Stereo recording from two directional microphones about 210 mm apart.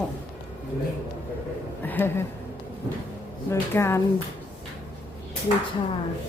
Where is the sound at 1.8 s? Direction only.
10° left (ahead or behind).